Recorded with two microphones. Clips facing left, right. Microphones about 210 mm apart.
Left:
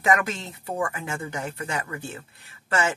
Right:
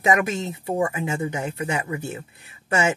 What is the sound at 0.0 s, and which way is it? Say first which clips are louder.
Speech: right 3 dB; 20° right (ahead or behind).